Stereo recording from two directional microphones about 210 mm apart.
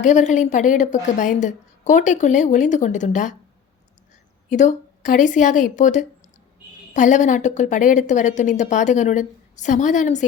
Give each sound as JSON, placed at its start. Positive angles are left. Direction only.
{"t": 0.0, "sound": "a woman's voice", "side_deg": 35}
{"t": 4.4, "sound": "a woman's voice", "side_deg": 35}